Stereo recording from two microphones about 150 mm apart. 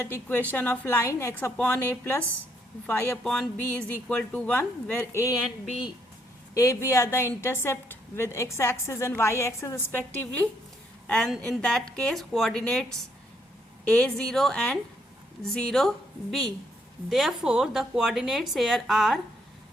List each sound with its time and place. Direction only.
0.0 s speech: 10° left (ahead or behind)
6.5 s a woman's voice: 20° left (ahead or behind); by 12.8 s 5° left (ahead or behind)
13.8 s speech: 5° left (ahead or behind)
17.1 s speech: centre (ahead or behind)